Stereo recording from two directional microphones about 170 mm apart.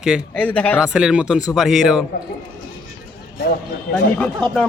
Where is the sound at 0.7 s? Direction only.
5° right (ahead or behind).